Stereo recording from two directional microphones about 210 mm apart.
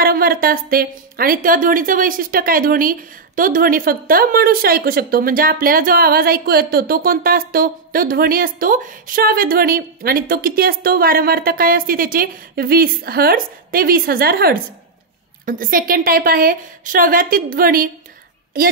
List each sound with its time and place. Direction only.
0.0 s a woman's voice: 45° right (ahead or behind)